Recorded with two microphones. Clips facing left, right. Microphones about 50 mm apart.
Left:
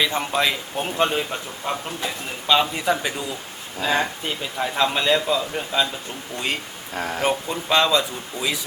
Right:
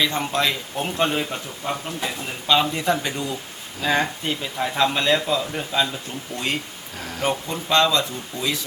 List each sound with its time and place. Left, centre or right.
0.0 s a man's voice: centre
6.9 s speech: left
7.3 s speech: centre